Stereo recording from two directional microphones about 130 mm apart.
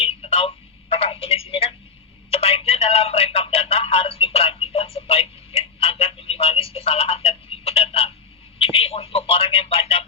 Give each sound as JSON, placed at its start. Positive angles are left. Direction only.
{"t": 0.0, "sound": "telephone", "side_deg": 45}